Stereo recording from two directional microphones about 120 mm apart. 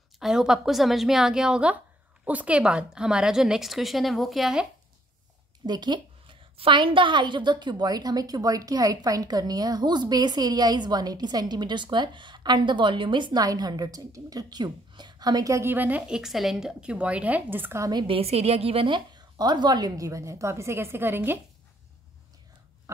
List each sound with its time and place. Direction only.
0.2 s a woman's voice: 5° right (ahead or behind)
5.7 s a woman's voice: 40° right (ahead or behind); by 17.9 s 20° right (ahead or behind)
17.9 s a woman's voice: 50° right (ahead or behind); by 21.4 s 20° right (ahead or behind)